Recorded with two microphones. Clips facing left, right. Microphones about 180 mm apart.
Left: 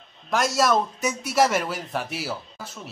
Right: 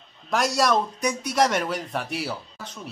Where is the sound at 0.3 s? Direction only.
Centre (ahead or behind).